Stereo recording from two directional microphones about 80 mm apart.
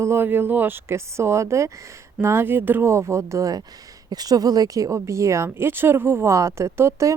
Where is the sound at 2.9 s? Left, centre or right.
Right.